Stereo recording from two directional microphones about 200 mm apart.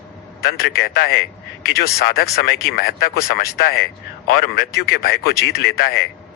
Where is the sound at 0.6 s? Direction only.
50° left (ahead or behind).